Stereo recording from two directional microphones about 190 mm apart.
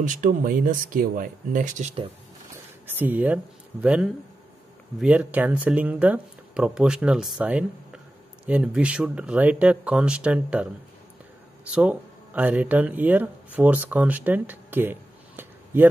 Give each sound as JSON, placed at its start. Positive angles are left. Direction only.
{"t": 0.0, "sound": "speech", "side_deg": -45}
{"t": 2.9, "sound": "speech", "side_deg": -10}